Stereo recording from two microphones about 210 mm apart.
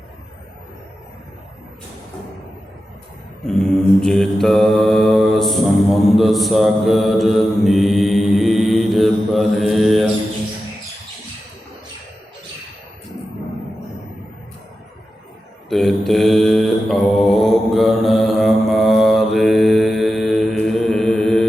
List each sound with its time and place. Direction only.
3.4 s mantra: 5° left (ahead or behind)
15.7 s mantra: centre (ahead or behind)